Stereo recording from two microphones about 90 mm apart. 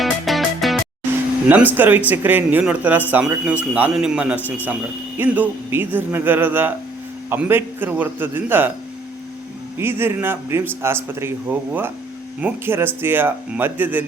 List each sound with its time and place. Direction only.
0.0 s music: centre (ahead or behind)
1.5 s speech: 20° right (ahead or behind)
9.7 s speech: 25° right (ahead or behind)